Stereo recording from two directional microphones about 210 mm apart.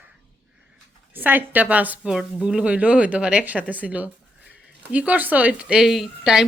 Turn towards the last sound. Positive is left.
turn(degrees=-5)  # may be behind; listen again after turning